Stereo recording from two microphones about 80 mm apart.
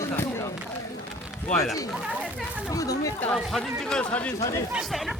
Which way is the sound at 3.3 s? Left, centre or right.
Centre.